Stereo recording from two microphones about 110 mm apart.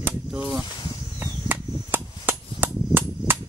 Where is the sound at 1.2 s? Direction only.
20° right (ahead or behind).